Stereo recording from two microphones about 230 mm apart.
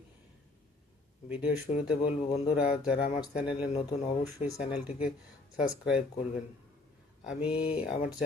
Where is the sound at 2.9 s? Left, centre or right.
Left.